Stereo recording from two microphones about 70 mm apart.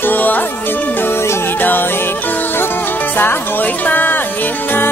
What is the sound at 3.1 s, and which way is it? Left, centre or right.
Speech, left.